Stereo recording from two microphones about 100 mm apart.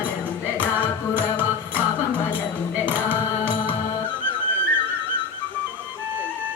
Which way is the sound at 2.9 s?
15° right (ahead or behind).